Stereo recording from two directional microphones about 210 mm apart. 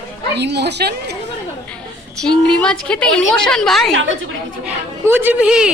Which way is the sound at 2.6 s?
5° left (ahead or behind).